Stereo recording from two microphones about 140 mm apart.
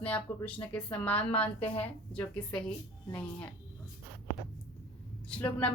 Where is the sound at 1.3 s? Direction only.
45° left (ahead or behind).